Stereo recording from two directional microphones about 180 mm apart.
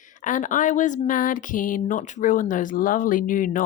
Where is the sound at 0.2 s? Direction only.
45° left (ahead or behind).